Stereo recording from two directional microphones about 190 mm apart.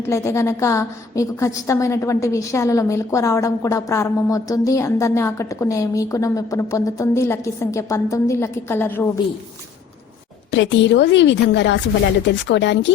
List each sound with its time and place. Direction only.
0.0 s a woman's voice: 15° left (ahead or behind)
10.5 s a woman's voice: 70° left (ahead or behind)